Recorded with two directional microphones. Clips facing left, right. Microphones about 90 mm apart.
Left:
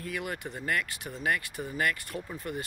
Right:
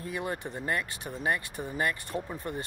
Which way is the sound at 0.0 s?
25° right (ahead or behind).